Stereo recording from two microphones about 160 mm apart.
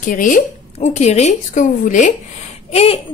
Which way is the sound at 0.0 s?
55° left (ahead or behind).